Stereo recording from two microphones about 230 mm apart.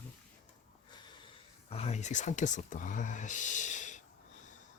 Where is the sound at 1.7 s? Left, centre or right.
Left.